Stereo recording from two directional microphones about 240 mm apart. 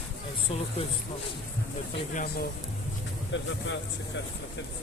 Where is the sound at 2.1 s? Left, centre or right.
Left.